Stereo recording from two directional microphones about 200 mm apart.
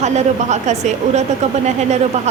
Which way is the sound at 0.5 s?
35° right (ahead or behind).